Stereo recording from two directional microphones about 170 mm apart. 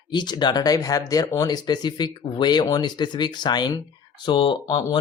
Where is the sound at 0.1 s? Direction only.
25° left (ahead or behind).